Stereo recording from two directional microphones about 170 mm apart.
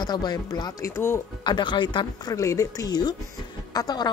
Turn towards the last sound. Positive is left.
turn(degrees=25)  # may be behind; listen again after turning